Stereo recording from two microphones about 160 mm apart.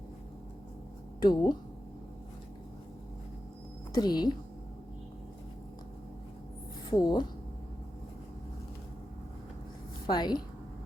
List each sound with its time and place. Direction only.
1.2 s a woman's voice: 25° left (ahead or behind)
3.9 s a woman's voice: 25° left (ahead or behind)
6.9 s a woman's voice: 25° left (ahead or behind)
10.1 s a woman's voice: 25° left (ahead or behind)